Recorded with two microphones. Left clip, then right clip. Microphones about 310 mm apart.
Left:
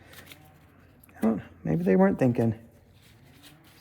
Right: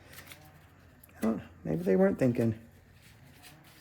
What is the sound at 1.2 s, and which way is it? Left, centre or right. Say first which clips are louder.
Speech: left 5 dB; centre.